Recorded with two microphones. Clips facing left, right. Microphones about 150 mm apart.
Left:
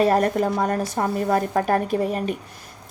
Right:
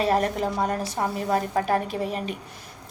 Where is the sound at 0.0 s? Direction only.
45° left (ahead or behind).